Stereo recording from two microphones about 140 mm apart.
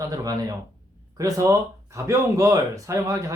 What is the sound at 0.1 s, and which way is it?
Speech, 25° right (ahead or behind).